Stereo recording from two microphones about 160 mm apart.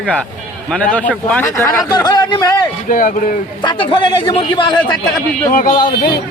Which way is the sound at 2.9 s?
55° left (ahead or behind).